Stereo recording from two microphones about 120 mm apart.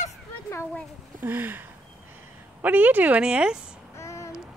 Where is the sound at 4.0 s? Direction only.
25° left (ahead or behind).